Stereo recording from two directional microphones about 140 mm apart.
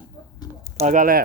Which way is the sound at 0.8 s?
75° right (ahead or behind).